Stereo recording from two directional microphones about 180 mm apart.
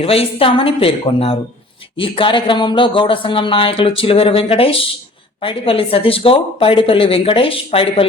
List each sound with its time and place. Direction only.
0.0 s speech: 30° left (ahead or behind)